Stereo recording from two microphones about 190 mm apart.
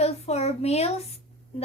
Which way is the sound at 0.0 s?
35° left (ahead or behind).